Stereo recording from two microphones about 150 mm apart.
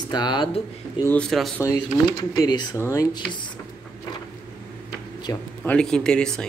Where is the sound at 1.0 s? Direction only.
5° left (ahead or behind).